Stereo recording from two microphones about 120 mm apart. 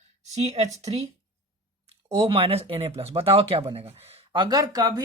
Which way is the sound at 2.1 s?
55° right (ahead or behind).